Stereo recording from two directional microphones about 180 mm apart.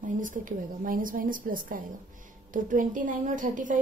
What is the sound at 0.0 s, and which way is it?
A woman's voice, 45° right (ahead or behind).